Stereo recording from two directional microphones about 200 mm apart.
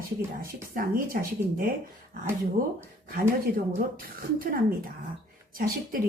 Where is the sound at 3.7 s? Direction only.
45° right (ahead or behind).